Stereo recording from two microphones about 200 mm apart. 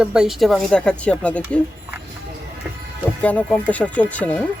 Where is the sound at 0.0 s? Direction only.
5° right (ahead or behind).